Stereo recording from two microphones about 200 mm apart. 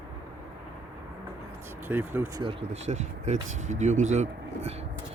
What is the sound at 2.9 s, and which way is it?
Speech, 35° right (ahead or behind).